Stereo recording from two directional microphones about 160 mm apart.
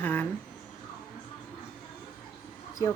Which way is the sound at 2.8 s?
20° left (ahead or behind).